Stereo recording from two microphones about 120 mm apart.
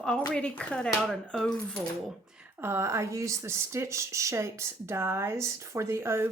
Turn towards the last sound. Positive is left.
turn(degrees=-20)  # may be behind; listen again after turning